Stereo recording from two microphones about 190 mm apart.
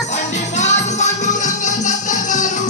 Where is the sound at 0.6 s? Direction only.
40° left (ahead or behind).